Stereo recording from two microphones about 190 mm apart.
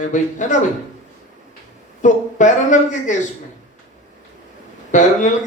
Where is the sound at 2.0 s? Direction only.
40° left (ahead or behind).